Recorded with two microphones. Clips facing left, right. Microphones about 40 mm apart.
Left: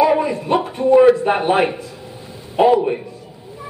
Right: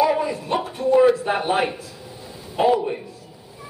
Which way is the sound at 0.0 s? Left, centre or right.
Centre.